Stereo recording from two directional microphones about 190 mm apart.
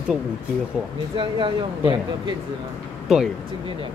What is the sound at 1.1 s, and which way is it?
Speech, 25° right (ahead or behind).